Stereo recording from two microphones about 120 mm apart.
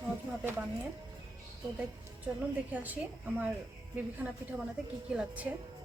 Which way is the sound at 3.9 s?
10° right (ahead or behind).